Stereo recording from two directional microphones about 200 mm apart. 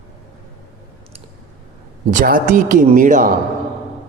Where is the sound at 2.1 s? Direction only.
40° right (ahead or behind).